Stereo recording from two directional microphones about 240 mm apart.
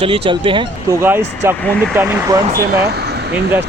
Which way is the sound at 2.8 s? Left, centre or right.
Right.